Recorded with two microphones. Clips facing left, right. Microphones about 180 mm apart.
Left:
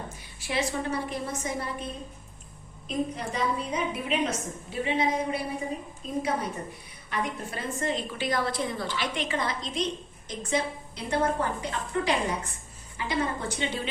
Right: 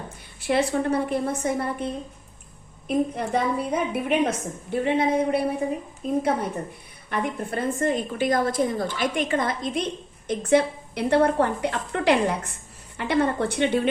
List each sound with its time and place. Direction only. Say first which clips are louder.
0.4 s a woman's voice: right 7 dB; 55° right (ahead or behind)